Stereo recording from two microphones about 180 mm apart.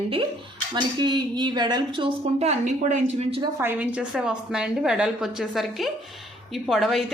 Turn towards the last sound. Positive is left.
turn(degrees=0)  # may be behind; listen again after turning